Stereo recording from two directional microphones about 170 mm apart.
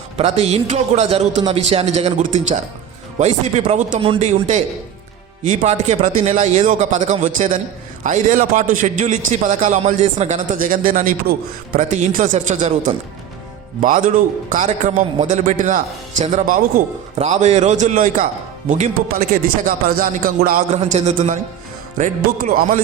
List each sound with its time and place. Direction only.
0.2 s a man's voice: 35° right (ahead or behind); by 16.8 s 55° right (ahead or behind)
17.2 s a man's voice: 45° right (ahead or behind)
20.7 s a man's voice: 40° right (ahead or behind)
22.4 s a man's voice: 55° right (ahead or behind)